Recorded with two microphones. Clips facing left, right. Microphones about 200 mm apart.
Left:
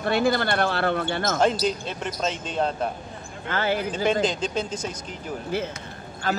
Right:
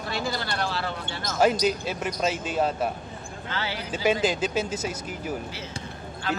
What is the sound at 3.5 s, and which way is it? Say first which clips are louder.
Speech: left 8 dB; 50° left (ahead or behind).